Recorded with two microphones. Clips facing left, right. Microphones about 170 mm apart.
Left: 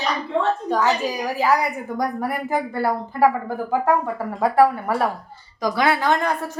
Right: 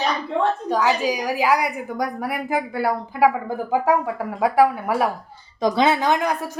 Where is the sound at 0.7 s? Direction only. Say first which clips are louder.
Right 2 dB; 10° right (ahead or behind).